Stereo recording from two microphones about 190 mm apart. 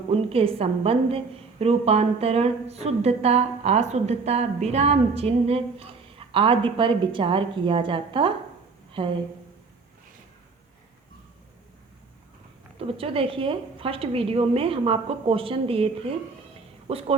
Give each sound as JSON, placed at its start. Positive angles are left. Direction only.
{"t": 0.1, "sound": "a woman's voice", "side_deg": -30}
{"t": 12.8, "sound": "a woman's voice", "side_deg": -30}